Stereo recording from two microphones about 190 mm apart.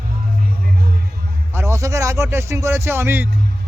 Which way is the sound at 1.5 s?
10° right (ahead or behind).